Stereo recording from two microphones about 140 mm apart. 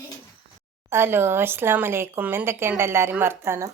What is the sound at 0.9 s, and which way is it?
A woman's voice, 15° right (ahead or behind).